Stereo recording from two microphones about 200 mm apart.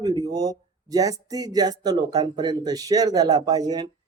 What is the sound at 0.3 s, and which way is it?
Speech, 20° right (ahead or behind).